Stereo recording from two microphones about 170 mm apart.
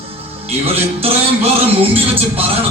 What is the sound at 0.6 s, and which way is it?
Music, 35° right (ahead or behind).